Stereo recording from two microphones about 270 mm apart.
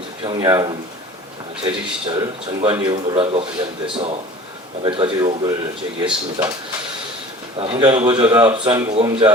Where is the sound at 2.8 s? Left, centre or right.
Centre.